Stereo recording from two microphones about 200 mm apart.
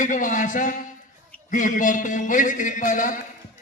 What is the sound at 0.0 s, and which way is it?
Speech, 40° left (ahead or behind).